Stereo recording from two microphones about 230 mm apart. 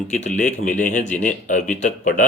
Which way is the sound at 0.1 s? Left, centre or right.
Left.